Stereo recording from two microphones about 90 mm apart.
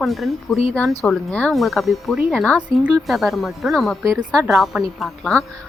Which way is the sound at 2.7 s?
35° right (ahead or behind).